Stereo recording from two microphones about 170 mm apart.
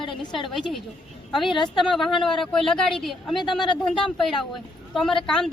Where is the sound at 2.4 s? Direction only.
Centre (ahead or behind).